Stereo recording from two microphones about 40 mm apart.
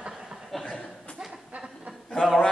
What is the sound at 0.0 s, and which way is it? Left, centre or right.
Chuckle, centre.